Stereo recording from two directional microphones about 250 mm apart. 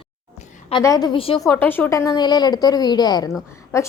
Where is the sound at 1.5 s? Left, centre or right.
Centre.